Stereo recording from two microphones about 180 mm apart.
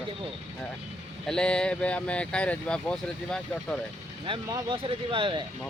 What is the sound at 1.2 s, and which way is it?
Speech, 5° left (ahead or behind).